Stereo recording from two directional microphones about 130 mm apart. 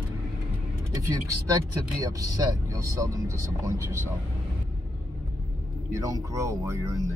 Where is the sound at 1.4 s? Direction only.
25° right (ahead or behind).